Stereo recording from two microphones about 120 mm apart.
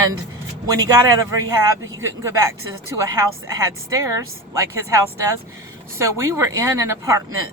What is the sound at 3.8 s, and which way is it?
Speech, 25° right (ahead or behind).